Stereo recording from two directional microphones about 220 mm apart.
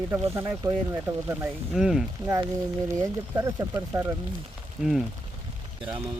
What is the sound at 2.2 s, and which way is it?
Speech, 15° right (ahead or behind).